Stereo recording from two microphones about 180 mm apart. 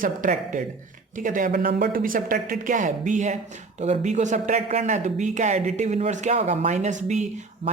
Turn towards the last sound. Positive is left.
turn(degrees=-40)  # may be behind; listen again after turning